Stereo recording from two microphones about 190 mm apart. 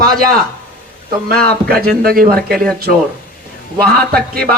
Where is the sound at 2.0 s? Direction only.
50° right (ahead or behind).